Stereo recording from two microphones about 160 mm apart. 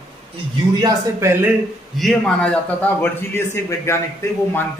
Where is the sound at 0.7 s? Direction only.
15° right (ahead or behind).